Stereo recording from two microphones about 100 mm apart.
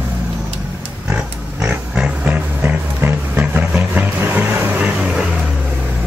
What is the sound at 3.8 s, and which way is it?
Vehicle, 20° right (ahead or behind).